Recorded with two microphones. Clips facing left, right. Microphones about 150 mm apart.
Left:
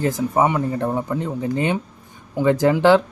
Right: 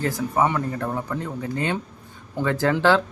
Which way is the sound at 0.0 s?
20° left (ahead or behind).